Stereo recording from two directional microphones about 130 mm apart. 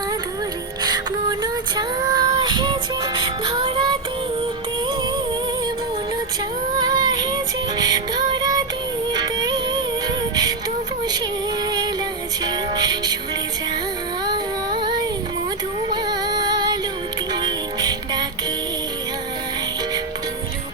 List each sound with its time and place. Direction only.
0.8 s child singing: 30° right (ahead or behind)
6.7 s music: 30° right (ahead or behind)
12.5 s music: 30° right (ahead or behind)
14.3 s music: 35° right (ahead or behind)